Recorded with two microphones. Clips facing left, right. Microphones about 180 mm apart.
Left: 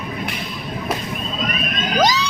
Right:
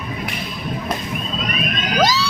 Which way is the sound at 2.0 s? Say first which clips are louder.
Even; 15° left (ahead or behind).